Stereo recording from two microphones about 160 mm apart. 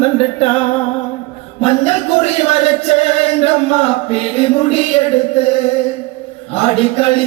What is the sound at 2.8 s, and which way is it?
Chant, 40° left (ahead or behind).